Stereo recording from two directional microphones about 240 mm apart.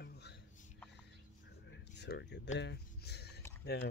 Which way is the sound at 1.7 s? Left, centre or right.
Left.